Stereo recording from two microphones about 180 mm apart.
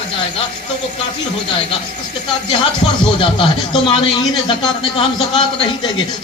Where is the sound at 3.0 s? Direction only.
25° left (ahead or behind).